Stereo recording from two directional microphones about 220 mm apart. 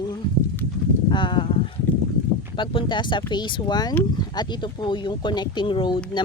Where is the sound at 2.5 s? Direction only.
20° left (ahead or behind).